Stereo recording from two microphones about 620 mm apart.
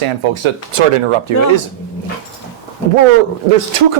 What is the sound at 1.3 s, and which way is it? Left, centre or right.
Speech, right.